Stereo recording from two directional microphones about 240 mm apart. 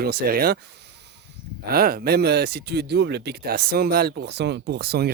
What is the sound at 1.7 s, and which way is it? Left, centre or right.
Speech, right.